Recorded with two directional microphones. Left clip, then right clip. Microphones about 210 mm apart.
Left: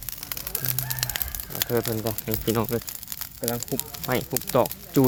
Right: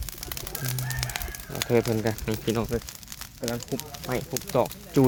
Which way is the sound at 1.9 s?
20° right (ahead or behind).